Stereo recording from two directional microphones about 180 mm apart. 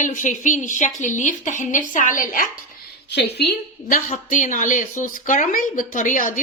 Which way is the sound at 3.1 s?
70° left (ahead or behind).